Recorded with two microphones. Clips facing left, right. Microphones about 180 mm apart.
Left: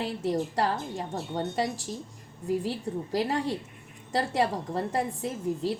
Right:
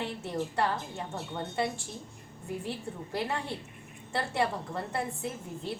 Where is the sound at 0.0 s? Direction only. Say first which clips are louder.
Left 5 dB; 35° left (ahead or behind).